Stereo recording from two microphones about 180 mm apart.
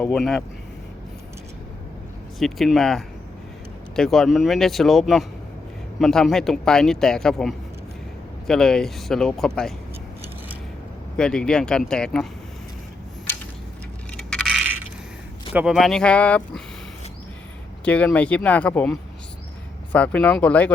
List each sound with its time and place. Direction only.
0.0 s speech: 5° left (ahead or behind)
2.4 s speech: centre (ahead or behind)
11.2 s speech: 5° left (ahead or behind)
14.2 s coin: 5° left (ahead or behind)
15.5 s speech: centre (ahead or behind)
17.8 s speech: 5° left (ahead or behind)